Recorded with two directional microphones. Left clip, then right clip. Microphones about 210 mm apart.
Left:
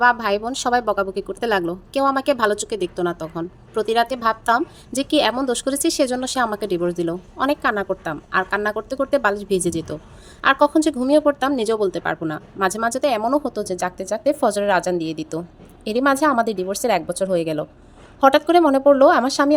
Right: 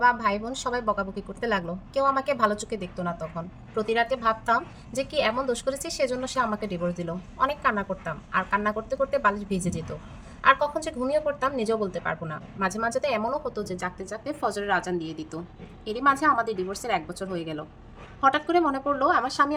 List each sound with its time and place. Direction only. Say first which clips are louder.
0.0 s speech: left 5 dB; 40° left (ahead or behind)